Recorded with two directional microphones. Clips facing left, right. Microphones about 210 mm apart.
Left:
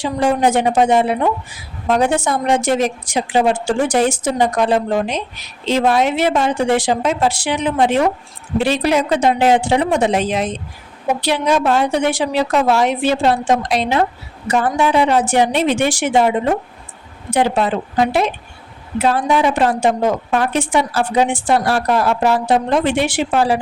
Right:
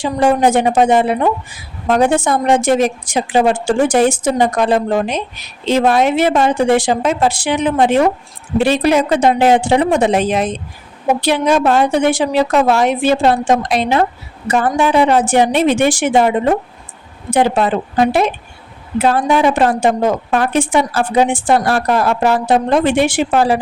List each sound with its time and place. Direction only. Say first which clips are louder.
0.0 s a woman's voice: right 3 dB; 50° right (ahead or behind)
17.3 s a woman's voice: right 2 dB; 50° right (ahead or behind)